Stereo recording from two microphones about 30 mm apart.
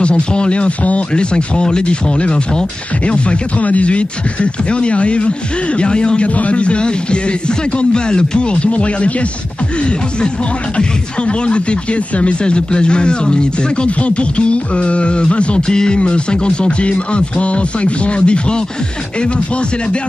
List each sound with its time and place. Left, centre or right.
0.0 s speech: left
1.1 s speech: left
3.6 s speech: left
6.2 s speech: left
8.6 s speech: left
10.8 s speech: left
15.7 s music: left
16.0 s speech: left